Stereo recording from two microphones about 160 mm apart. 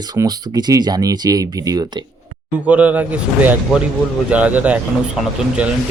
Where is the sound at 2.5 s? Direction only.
10° right (ahead or behind).